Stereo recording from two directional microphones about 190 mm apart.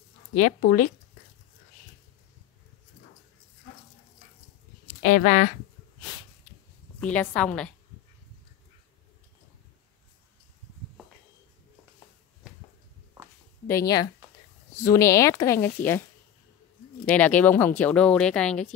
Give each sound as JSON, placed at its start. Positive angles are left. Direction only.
{"t": 0.3, "sound": "speech", "side_deg": 45}
{"t": 5.0, "sound": "speech", "side_deg": 40}
{"t": 7.0, "sound": "speech", "side_deg": 5}
{"t": 13.7, "sound": "speech", "side_deg": 15}
{"t": 17.0, "sound": "speech", "side_deg": 10}